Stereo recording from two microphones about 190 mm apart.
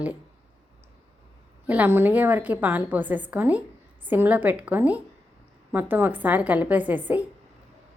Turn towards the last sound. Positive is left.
turn(degrees=-10)  # may be behind; listen again after turning